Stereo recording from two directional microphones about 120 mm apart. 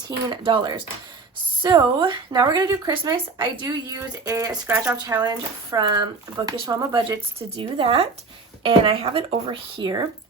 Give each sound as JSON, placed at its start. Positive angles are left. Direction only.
{"t": 0.3, "sound": "speech", "side_deg": -40}
{"t": 7.3, "sound": "speech", "side_deg": -50}